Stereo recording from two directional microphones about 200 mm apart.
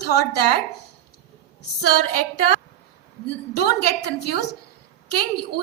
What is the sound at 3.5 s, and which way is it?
Speech, 55° left (ahead or behind).